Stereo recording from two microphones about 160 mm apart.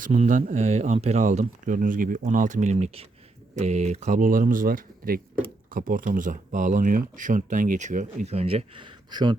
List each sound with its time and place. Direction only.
0.0 s speech: 50° right (ahead or behind); by 9.3 s 30° right (ahead or behind)